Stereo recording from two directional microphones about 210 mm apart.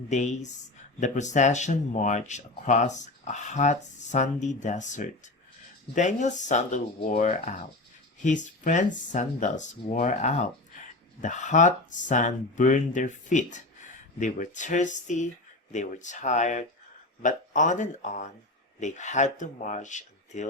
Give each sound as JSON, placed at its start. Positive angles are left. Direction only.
{"t": 0.1, "sound": "speech", "side_deg": 35}